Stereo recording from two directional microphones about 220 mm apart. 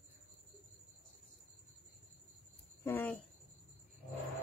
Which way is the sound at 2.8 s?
10° left (ahead or behind).